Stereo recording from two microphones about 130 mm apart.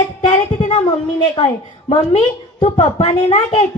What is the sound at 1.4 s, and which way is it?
Speech, 35° left (ahead or behind).